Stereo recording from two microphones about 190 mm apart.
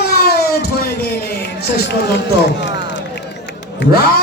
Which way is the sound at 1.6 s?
55° left (ahead or behind).